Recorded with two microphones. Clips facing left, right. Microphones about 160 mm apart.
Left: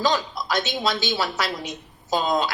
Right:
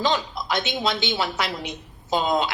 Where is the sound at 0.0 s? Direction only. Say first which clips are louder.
Left 1 dB; 20° right (ahead or behind).